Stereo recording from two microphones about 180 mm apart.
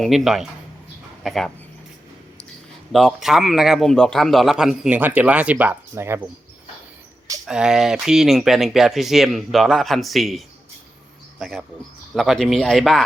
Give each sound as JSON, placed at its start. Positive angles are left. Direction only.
{"t": 0.0, "sound": "a man's voice", "side_deg": 0}
{"t": 2.9, "sound": "a man's voice", "side_deg": 0}
{"t": 7.4, "sound": "a man's voice", "side_deg": -5}